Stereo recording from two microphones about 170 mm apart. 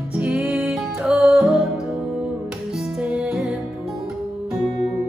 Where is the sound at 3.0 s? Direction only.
5° right (ahead or behind).